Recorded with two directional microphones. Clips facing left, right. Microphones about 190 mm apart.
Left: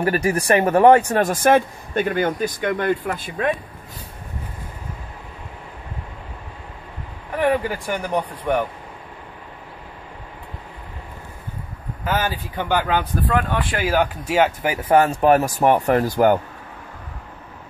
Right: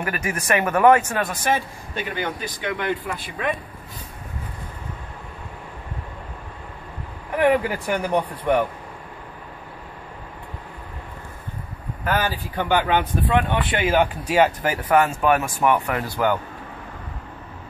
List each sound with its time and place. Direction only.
0.0 s speech: 35° left (ahead or behind)
1.3 s speech: 50° left (ahead or behind)
7.3 s speech: 5° right (ahead or behind)
12.0 s speech: 5° left (ahead or behind)
14.4 s speech: 10° left (ahead or behind)
14.8 s speech: 30° left (ahead or behind)